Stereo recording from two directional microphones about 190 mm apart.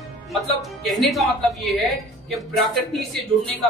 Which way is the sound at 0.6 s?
Centre (ahead or behind).